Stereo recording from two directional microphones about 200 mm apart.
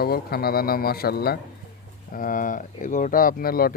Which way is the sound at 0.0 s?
50° left (ahead or behind).